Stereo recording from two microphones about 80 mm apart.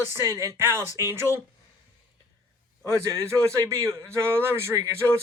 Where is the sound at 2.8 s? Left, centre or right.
Right.